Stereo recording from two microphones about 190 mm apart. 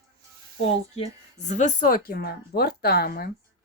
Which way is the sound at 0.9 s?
35° left (ahead or behind).